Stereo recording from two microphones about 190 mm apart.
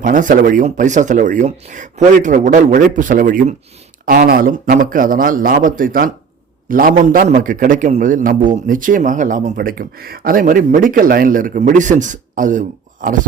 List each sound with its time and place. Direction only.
0.0 s a man's voice: 45° right (ahead or behind)